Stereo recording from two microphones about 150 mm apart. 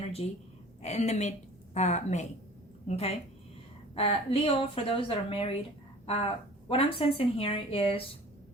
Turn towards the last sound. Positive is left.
turn(degrees=40)  # may be behind; listen again after turning